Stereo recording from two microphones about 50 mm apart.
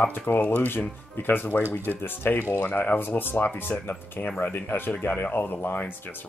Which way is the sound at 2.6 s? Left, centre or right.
Left.